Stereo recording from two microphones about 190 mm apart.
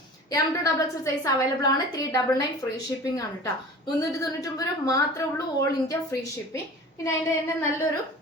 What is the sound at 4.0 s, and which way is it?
Speech, 20° left (ahead or behind).